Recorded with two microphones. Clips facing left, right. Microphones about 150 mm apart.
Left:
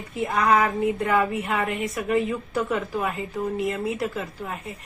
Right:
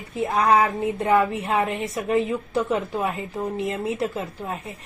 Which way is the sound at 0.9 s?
25° right (ahead or behind).